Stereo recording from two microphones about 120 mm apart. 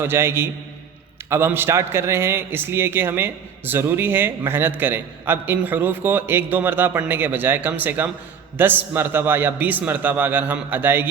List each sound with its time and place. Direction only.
0.0 s a man's voice: 20° right (ahead or behind)